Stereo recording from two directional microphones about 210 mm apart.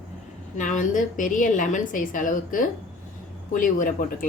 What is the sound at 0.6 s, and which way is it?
A woman's voice, 35° left (ahead or behind).